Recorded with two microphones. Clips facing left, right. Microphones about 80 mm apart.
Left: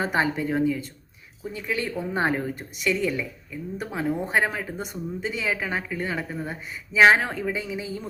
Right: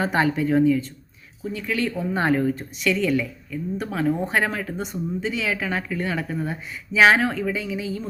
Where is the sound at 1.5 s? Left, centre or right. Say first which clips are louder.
Right 3 dB; centre.